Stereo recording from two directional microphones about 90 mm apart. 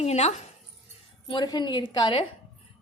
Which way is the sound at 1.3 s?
60° left (ahead or behind).